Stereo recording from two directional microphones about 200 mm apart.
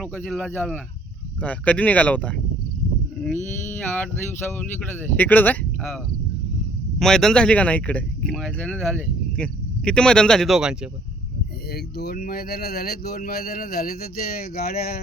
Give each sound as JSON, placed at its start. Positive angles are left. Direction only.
{"t": 0.0, "sound": "speech", "side_deg": 5}
{"t": 4.5, "sound": "speech", "side_deg": 10}
{"t": 7.0, "sound": "speech", "side_deg": 0}
{"t": 11.7, "sound": "speech", "side_deg": 50}